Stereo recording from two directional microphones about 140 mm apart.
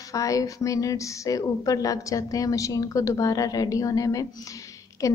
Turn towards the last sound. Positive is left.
turn(degrees=25)  # may be behind; listen again after turning